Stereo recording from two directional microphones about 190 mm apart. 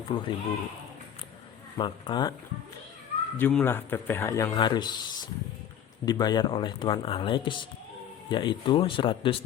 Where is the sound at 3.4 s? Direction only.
10° left (ahead or behind).